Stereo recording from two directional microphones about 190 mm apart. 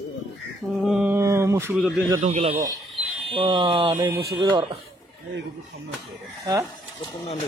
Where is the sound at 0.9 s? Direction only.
5° right (ahead or behind).